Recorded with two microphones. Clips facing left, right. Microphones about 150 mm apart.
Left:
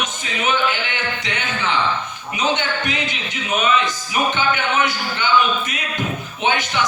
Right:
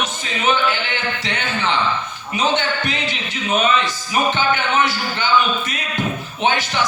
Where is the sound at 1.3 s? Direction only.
35° right (ahead or behind).